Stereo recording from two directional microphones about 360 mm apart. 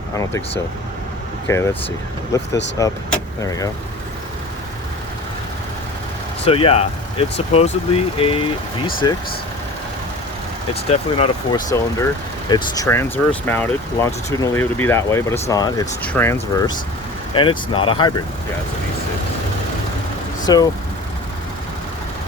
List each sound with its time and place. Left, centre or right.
0.2 s speech: centre
6.4 s speech: centre
10.8 s speech: centre
20.4 s speech: centre